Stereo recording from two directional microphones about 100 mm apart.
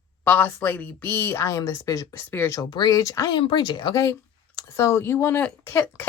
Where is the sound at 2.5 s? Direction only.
40° left (ahead or behind).